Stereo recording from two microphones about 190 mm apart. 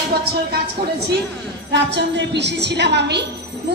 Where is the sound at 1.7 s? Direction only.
65° right (ahead or behind).